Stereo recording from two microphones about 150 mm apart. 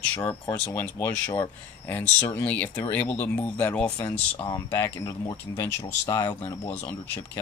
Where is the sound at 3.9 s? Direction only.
30° left (ahead or behind); by 6.9 s 15° left (ahead or behind).